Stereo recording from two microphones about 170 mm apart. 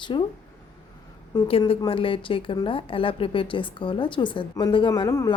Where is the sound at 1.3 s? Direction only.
30° left (ahead or behind).